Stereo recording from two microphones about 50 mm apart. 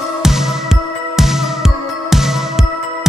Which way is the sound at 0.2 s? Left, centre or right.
Centre.